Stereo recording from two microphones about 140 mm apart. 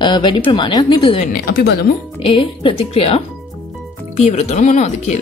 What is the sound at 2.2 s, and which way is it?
Speech, 40° left (ahead or behind).